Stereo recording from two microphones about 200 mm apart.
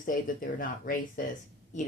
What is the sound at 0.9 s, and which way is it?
Speech, 45° left (ahead or behind).